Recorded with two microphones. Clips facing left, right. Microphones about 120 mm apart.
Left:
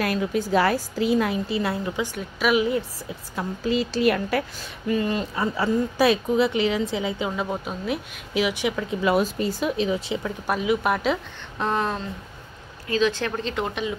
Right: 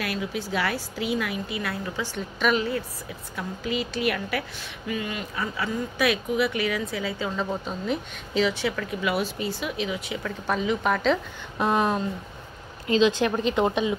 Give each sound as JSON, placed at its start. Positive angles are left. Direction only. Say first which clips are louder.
{"t": 0.0, "sound": "a woman's voice", "louder": "left 6 dB", "side_deg": 45}
{"t": 2.1, "sound": "speech", "louder": "left 2 dB", "side_deg": 5}
{"t": 3.3, "sound": "a woman's voice", "louder": "left 5 dB", "side_deg": 35}
{"t": 9.0, "sound": "a woman's voice", "louder": "left 6 dB", "side_deg": 40}
{"t": 10.4, "sound": "speech", "louder": "left 1 dB", "side_deg": 10}
{"t": 11.5, "sound": "a sound", "louder": "right 2 dB", "side_deg": -10}
{"t": 12.8, "sound": "speech", "louder": "right 2 dB", "side_deg": -20}